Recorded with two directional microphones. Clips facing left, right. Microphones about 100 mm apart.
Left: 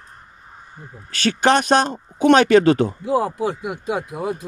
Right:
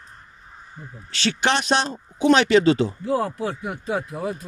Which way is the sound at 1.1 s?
45° left (ahead or behind).